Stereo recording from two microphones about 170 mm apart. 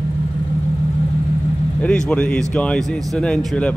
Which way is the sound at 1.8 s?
5° left (ahead or behind).